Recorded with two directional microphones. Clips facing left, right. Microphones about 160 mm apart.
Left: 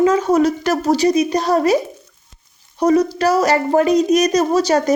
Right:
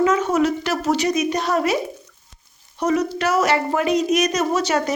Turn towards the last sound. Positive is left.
turn(degrees=35)  # may be behind; listen again after turning